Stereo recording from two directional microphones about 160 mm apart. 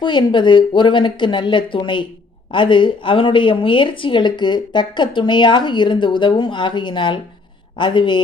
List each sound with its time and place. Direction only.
0.0 s speech: 30° left (ahead or behind)